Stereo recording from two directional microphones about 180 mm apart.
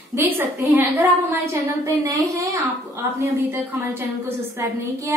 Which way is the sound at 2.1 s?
20° right (ahead or behind).